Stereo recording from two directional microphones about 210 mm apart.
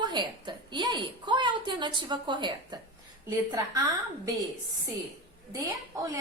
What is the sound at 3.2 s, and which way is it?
Speech, 15° right (ahead or behind).